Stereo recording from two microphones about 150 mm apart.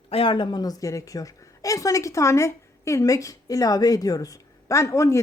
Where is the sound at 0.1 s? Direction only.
35° left (ahead or behind).